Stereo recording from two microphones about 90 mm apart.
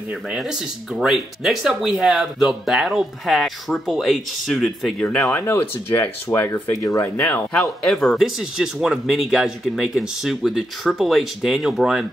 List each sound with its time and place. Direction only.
0.9 s speech: 5° right (ahead or behind)
5.3 s speech: 25° left (ahead or behind)
7.2 s speech: 20° left (ahead or behind)
7.8 s speech: 5° left (ahead or behind)